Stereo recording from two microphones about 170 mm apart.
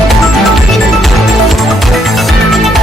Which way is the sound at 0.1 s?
Centre (ahead or behind).